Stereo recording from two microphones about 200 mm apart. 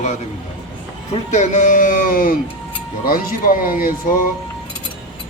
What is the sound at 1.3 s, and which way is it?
A man's voice, 35° left (ahead or behind).